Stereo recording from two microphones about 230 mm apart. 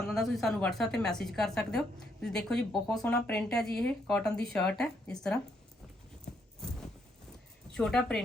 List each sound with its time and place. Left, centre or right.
0.0 s speech: centre
7.7 s speech: centre